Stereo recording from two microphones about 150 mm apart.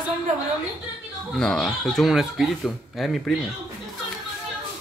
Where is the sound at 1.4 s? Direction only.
5° left (ahead or behind).